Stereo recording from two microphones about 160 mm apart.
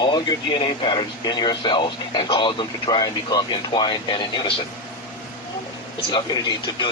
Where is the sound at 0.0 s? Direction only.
30° left (ahead or behind).